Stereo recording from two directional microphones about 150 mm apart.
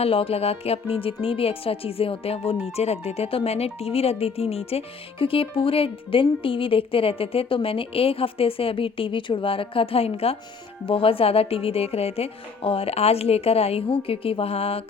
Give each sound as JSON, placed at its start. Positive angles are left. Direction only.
{"t": 0.0, "sound": "speech", "side_deg": 40}